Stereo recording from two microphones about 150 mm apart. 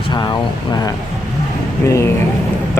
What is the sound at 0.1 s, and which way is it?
Speech, 30° left (ahead or behind).